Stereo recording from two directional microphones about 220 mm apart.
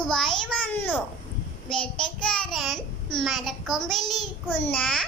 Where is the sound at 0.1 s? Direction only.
5° left (ahead or behind).